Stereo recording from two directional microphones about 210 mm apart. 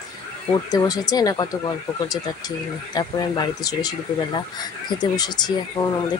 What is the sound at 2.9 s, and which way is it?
Speech, 20° left (ahead or behind).